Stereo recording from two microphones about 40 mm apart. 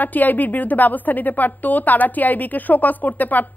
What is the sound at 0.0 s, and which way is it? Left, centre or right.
A woman's voice, left.